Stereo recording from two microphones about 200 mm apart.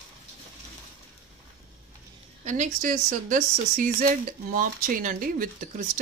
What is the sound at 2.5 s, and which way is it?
Speech, 40° right (ahead or behind).